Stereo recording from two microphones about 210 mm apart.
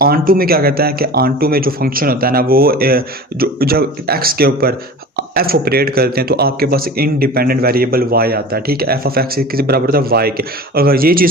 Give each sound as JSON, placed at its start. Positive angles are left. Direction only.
{"t": 0.0, "sound": "speech", "side_deg": -45}